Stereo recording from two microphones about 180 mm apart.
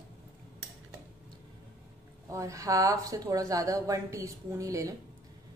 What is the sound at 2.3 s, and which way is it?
A woman's voice, 15° right (ahead or behind).